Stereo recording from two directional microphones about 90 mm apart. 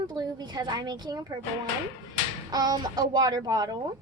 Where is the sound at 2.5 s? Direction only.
50° right (ahead or behind).